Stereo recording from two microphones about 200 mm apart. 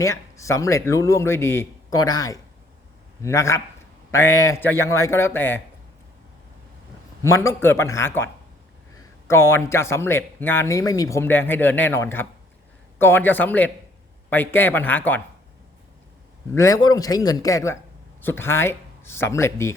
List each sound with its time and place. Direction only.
0.0 s speech: 15° left (ahead or behind)
7.2 s speech: 15° left (ahead or behind)
16.6 s speech: 15° left (ahead or behind)